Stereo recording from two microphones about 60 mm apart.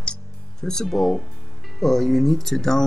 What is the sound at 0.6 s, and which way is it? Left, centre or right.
Speech, centre.